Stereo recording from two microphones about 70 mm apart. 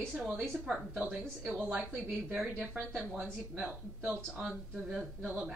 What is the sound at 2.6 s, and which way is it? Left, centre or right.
Speech, centre.